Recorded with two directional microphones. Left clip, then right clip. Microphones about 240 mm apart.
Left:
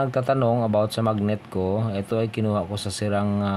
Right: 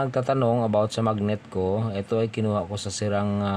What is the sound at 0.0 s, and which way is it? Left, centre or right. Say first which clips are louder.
Speech: left 2 dB; centre.